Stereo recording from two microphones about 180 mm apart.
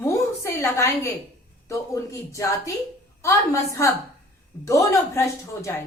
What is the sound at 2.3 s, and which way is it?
A woman's voice, 15° left (ahead or behind).